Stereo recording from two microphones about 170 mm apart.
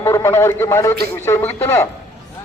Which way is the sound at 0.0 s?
15° left (ahead or behind).